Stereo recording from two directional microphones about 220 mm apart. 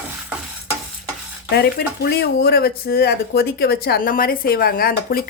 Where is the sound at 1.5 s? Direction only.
45° left (ahead or behind).